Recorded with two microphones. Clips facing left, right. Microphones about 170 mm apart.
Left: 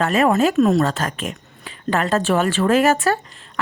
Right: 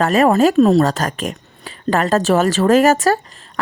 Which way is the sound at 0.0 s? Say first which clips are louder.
Right 4 dB; 40° right (ahead or behind).